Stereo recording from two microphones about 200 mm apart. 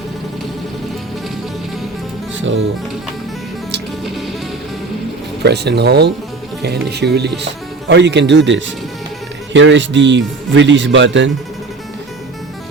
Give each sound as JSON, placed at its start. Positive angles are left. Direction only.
{"t": 5.4, "sound": "speech", "side_deg": -55}